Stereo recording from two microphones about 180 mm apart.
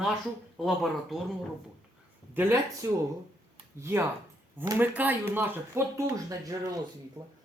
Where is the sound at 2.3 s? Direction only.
10° right (ahead or behind).